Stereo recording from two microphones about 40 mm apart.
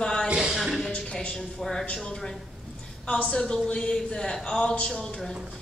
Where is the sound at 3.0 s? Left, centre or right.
Left.